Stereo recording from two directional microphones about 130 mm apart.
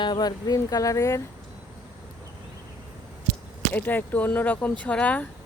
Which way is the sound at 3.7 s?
15° left (ahead or behind).